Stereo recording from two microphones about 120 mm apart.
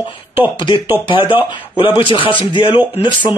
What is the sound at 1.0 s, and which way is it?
Speech, 45° left (ahead or behind).